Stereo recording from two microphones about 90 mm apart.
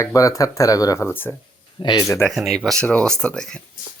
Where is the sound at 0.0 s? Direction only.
40° left (ahead or behind).